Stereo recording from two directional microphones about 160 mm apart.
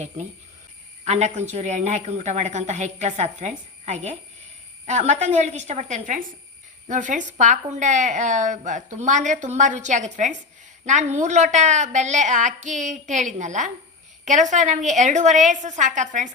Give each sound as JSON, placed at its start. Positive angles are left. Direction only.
{"t": 1.0, "sound": "speech", "side_deg": -45}